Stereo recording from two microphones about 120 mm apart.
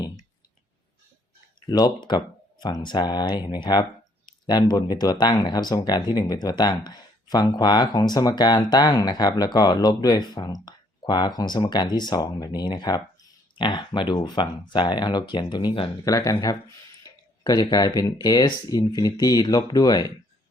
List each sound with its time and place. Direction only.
1.7 s speech: 35° left (ahead or behind)
16.0 s speech: 30° left (ahead or behind)